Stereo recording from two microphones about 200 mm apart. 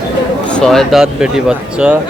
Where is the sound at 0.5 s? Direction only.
5° left (ahead or behind).